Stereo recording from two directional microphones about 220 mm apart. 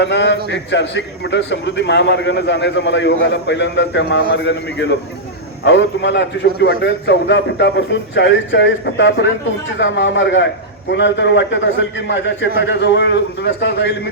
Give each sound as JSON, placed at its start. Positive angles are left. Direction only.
{"t": 0.0, "sound": "a man's voice", "side_deg": 50}